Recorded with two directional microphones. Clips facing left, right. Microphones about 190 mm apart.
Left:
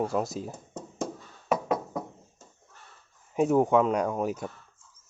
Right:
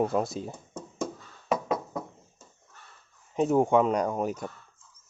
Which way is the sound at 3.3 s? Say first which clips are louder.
Even; 5° left (ahead or behind).